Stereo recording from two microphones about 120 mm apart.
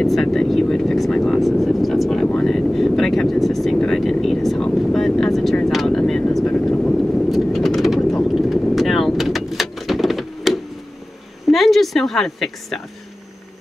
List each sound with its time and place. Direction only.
0.0 s speech: centre (ahead or behind)
2.2 s vehicle: 5° left (ahead or behind)
11.4 s a sound: centre (ahead or behind)